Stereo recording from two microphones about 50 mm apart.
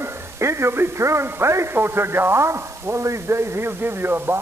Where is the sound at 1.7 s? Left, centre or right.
Right.